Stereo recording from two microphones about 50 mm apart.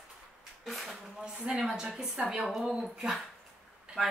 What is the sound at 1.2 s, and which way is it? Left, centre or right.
A woman's voice, centre.